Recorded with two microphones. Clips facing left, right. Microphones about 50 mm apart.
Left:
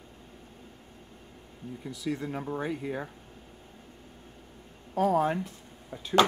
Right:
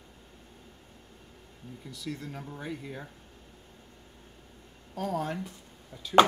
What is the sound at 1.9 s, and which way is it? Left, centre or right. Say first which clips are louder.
Speech: left 6 dB; centre.